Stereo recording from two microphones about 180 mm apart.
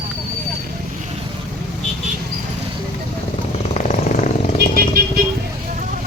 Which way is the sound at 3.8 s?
40° left (ahead or behind).